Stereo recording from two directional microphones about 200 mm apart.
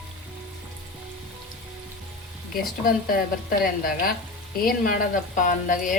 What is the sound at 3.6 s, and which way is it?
A woman's voice, 45° left (ahead or behind).